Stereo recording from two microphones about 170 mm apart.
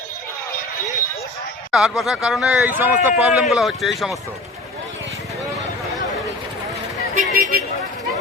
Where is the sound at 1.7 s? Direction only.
Centre (ahead or behind).